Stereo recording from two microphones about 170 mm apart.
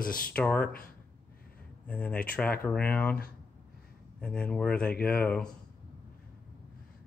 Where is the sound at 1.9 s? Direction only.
10° left (ahead or behind).